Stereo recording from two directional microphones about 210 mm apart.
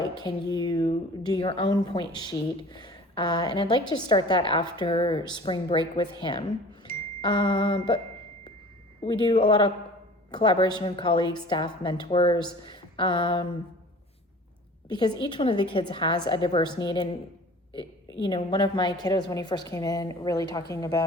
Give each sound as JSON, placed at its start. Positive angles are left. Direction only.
{"t": 0.0, "sound": "speech", "side_deg": 20}
{"t": 7.2, "sound": "speech", "side_deg": 20}
{"t": 9.3, "sound": "speech", "side_deg": 25}
{"t": 14.8, "sound": "speech", "side_deg": 20}
{"t": 18.2, "sound": "speech", "side_deg": 20}